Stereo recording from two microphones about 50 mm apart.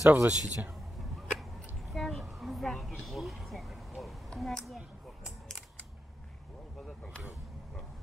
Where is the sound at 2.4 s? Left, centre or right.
Centre.